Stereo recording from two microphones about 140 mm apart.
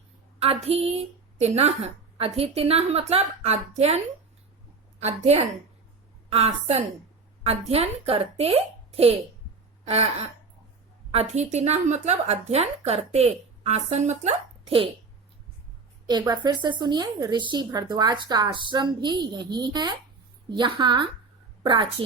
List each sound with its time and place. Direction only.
0.3 s a woman's voice: 45° right (ahead or behind)
16.0 s a woman's voice: 30° right (ahead or behind)